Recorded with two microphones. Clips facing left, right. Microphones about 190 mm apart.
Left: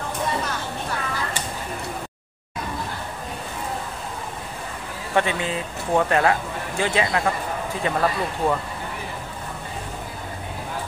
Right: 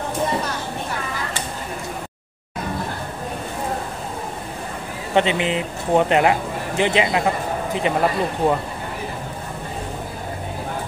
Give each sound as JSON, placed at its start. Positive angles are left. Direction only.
{"t": 5.1, "sound": "a man's voice", "side_deg": -20}